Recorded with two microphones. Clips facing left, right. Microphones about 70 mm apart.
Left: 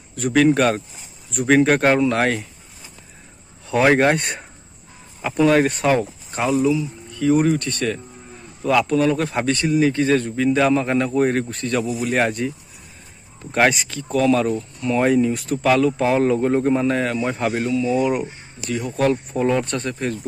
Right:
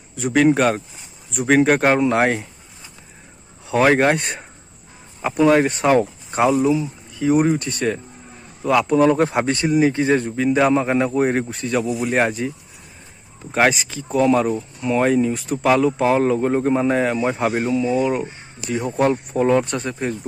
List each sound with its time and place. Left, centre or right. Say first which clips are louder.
0.2 s speech: even; centre
2.0 s speech: right 1 dB; centre
3.7 s speech: even; centre
5.9 s speech: right 3 dB; right
7.2 s speech: even; centre
8.6 s speech: even; centre
8.9 s speech: right 3 dB; right; by 14.1 s centre
14.1 s speech: right 1 dB; centre
15.0 s speech: left 2 dB; centre
17.6 s speech: right 1 dB; right
17.9 s speech: even; centre
18.7 s speech: right 1 dB; right
19.3 s speech: right 3 dB; centre